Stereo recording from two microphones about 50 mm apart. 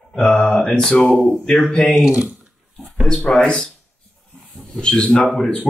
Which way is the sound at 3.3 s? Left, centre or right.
Left.